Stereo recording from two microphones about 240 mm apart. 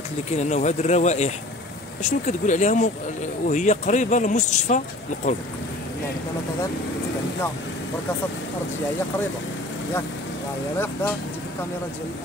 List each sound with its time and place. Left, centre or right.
0.4 s speech: left